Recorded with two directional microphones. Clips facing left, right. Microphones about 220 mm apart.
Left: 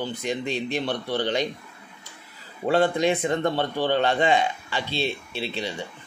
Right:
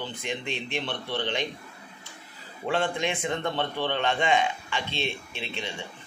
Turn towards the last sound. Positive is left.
turn(degrees=35)  # may be behind; listen again after turning